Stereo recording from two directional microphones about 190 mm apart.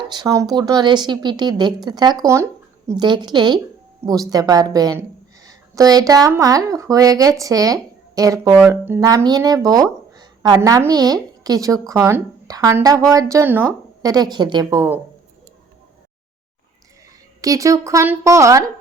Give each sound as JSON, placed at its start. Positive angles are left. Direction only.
{"t": 0.0, "sound": "a woman's voice", "side_deg": -25}
{"t": 17.4, "sound": "a woman's voice", "side_deg": -15}